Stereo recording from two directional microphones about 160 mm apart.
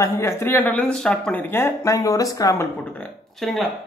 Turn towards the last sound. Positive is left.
turn(degrees=0)  # may be behind; listen again after turning